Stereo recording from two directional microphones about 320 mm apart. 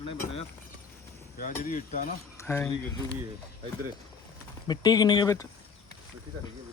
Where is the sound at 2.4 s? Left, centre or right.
Centre.